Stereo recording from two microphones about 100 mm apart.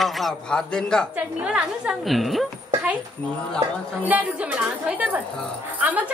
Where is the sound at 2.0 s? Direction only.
Centre (ahead or behind).